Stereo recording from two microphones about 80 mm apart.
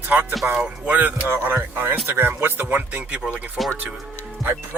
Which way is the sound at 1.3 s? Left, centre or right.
Right.